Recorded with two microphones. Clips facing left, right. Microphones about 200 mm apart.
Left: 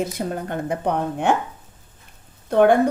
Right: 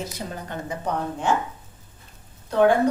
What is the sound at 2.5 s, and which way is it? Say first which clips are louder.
Speech: left 3 dB; 60° left (ahead or behind).